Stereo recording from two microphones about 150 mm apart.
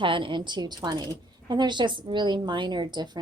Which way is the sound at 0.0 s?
35° right (ahead or behind).